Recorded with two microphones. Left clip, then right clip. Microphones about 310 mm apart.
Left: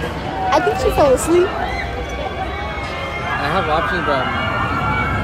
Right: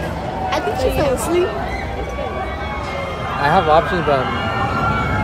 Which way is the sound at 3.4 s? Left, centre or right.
Right.